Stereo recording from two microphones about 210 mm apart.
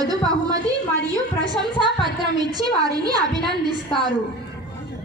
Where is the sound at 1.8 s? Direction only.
20° right (ahead or behind).